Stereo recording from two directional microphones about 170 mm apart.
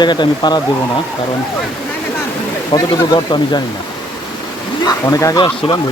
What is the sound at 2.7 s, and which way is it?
Speech, 20° left (ahead or behind).